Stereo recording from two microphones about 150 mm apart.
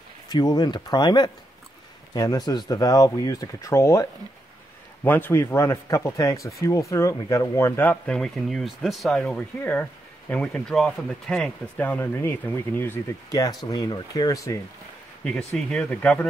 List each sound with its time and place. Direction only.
0.3 s speech: 25° left (ahead or behind)
15.2 s speech: 5° left (ahead or behind)